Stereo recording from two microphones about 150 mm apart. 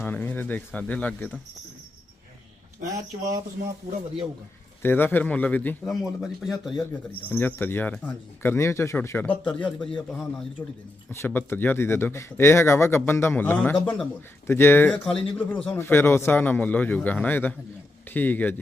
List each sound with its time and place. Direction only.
0.0 s speech: 10° left (ahead or behind)
4.8 s speech: 15° left (ahead or behind)
7.1 s a man's voice: 10° left (ahead or behind)